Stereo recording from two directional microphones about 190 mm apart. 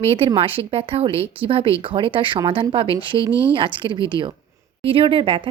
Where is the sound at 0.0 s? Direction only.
30° right (ahead or behind).